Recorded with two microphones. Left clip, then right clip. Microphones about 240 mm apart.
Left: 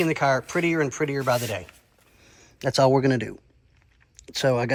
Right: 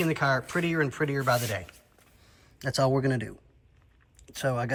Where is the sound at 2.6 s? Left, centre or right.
Centre.